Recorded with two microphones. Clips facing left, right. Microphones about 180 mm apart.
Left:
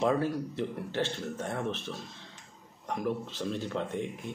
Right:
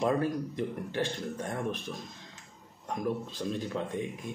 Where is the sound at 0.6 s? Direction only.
15° right (ahead or behind).